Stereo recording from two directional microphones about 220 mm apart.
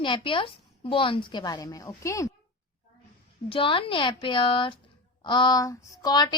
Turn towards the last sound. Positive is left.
turn(degrees=20)  # may be behind; listen again after turning